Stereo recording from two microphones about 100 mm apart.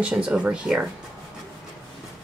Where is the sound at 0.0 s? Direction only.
10° right (ahead or behind).